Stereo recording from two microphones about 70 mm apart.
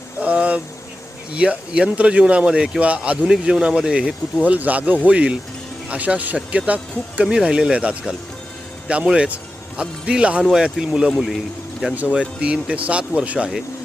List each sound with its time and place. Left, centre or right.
0.2 s speech: centre
3.2 s speech: centre
11.1 s speech: centre
11.9 s speech: centre